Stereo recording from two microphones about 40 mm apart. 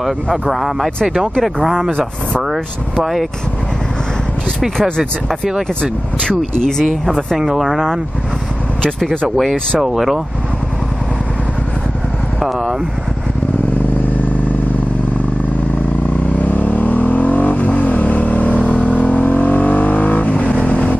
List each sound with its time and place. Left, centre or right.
0.0 s speech: centre
1.9 s speech: left
2.5 s speech: centre
5.8 s speech: centre
7.3 s speech: centre
9.8 s speech: centre
12.4 s speech: centre
16.3 s vehicle: left